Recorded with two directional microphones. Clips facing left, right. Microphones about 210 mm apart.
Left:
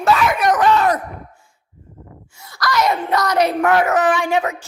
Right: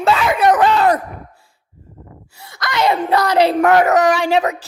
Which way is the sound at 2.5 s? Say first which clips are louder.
Right 1 dB; 25° right (ahead or behind).